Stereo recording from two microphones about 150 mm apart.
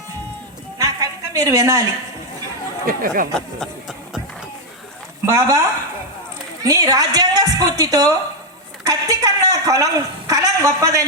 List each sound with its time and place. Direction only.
0.8 s a sound: 20° right (ahead or behind)
2.8 s speech: 70° right (ahead or behind)
3.3 s music: centre (ahead or behind)
5.2 s a woman's voice: 20° right (ahead or behind)